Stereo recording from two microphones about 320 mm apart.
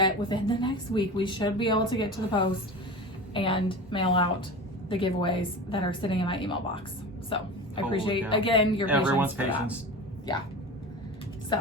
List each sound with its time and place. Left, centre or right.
0.0 s speech: centre
8.9 s speech: centre
11.5 s music: centre